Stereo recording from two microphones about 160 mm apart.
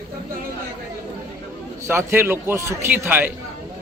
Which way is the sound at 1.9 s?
15° right (ahead or behind).